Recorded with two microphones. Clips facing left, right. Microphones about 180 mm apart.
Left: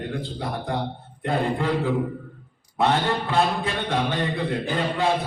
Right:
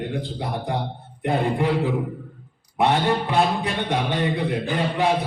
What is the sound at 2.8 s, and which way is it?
Speech, 15° right (ahead or behind).